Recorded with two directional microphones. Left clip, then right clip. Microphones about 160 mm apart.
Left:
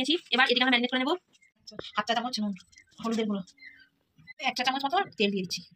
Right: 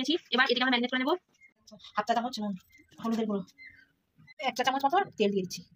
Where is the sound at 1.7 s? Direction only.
50° right (ahead or behind).